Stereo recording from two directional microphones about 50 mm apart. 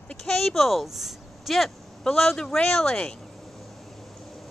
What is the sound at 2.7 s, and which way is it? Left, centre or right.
Speech, centre.